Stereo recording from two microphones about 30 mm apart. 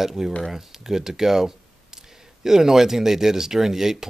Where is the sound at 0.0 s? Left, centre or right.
Centre.